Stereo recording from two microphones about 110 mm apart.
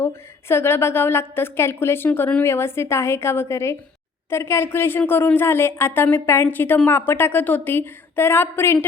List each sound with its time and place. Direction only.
0.0 s a woman's voice: 20° left (ahead or behind)